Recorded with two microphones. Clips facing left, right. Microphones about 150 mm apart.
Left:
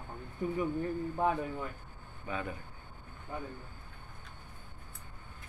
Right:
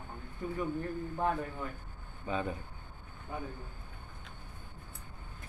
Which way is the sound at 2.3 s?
25° right (ahead or behind).